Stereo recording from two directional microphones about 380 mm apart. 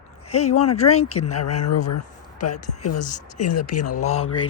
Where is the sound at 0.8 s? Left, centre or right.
Left.